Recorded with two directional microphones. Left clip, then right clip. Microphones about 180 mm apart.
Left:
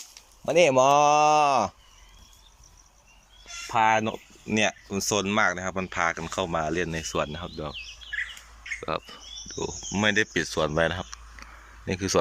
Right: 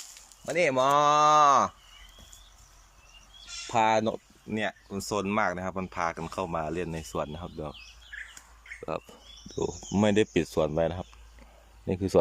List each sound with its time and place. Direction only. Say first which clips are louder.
0.4 s speech: left 5 dB; 10° left (ahead or behind)
3.7 s speech: left 2 dB; 20° right (ahead or behind)
4.4 s speech: left 7 dB; 5° left (ahead or behind)
9.0 s speech: left 8 dB; 15° right (ahead or behind)